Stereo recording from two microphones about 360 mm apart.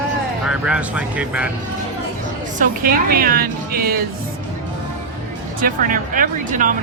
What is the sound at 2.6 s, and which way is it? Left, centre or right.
Speech, right.